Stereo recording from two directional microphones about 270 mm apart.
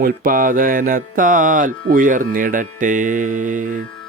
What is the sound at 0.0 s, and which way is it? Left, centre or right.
Music, right.